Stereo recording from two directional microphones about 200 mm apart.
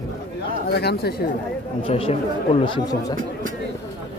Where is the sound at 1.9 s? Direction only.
30° left (ahead or behind).